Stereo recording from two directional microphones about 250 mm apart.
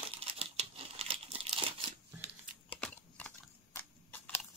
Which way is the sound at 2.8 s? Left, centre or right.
Centre.